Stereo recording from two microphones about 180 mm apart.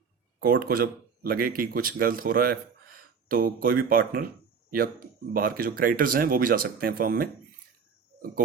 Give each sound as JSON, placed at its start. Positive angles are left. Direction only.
{"t": 0.3, "sound": "speech", "side_deg": -55}
{"t": 5.3, "sound": "speech", "side_deg": -55}